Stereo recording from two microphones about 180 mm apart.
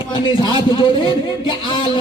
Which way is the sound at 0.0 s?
30° left (ahead or behind).